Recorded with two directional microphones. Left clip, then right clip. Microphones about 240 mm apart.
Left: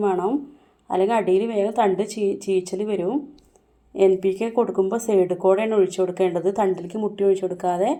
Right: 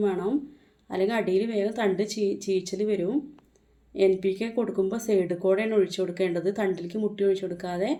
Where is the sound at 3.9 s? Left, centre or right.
Centre.